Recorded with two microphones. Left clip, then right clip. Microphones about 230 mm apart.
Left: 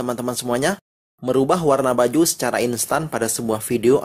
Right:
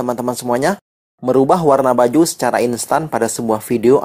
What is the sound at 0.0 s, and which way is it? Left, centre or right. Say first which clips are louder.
Speech: right 5 dB; centre.